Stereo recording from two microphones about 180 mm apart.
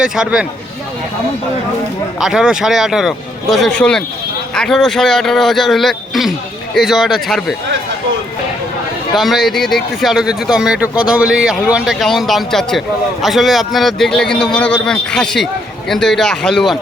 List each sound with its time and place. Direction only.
0.0 s a man's voice: 5° right (ahead or behind)
2.1 s a man's voice: centre (ahead or behind)
9.1 s a man's voice: centre (ahead or behind)